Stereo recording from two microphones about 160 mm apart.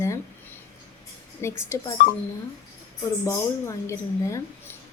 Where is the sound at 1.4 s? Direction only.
15° left (ahead or behind).